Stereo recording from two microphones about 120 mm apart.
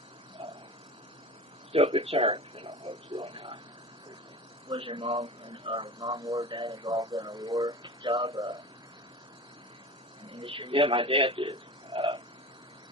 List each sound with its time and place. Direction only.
1.7 s a man's voice: 55° right (ahead or behind)
2.6 s a man's voice: 35° right (ahead or behind)
4.8 s a man's voice: 50° right (ahead or behind)
6.0 s speech: 30° right (ahead or behind)
6.4 s a man's voice: 45° right (ahead or behind)
6.8 s speech: 30° right (ahead or behind)
8.0 s speech: 40° right (ahead or behind)
10.2 s a man's voice: 50° right (ahead or behind)
11.9 s a sound: 50° right (ahead or behind)